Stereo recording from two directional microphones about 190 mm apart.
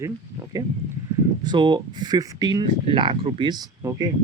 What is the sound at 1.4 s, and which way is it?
Speech, 25° right (ahead or behind).